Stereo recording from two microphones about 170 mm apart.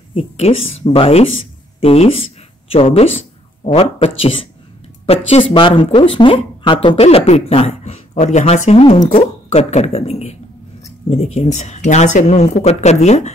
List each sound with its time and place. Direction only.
0.1 s speech: 35° left (ahead or behind)